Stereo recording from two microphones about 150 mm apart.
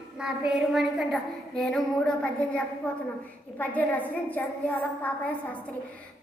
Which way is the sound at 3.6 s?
10° left (ahead or behind).